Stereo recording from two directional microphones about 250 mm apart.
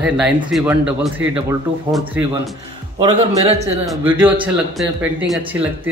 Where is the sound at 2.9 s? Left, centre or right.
Centre.